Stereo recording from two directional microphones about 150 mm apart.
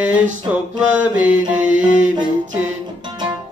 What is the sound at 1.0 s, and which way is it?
Mantra, 10° right (ahead or behind).